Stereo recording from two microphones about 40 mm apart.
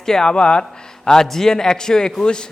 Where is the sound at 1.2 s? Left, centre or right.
Centre.